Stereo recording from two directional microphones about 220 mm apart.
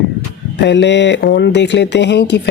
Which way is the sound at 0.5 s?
50° left (ahead or behind).